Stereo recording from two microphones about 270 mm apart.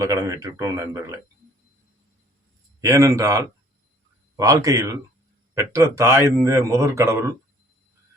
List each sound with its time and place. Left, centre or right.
0.0 s a man's voice: centre
2.8 s a man's voice: centre